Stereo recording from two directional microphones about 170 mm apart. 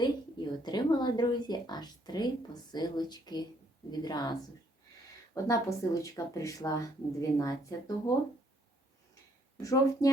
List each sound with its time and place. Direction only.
0.0 s a sound: 25° left (ahead or behind)
2.7 s speech: 25° left (ahead or behind)
9.6 s speech: 20° left (ahead or behind)